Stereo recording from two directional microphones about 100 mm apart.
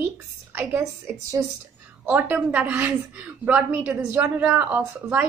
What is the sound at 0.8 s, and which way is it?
Speech, 30° right (ahead or behind).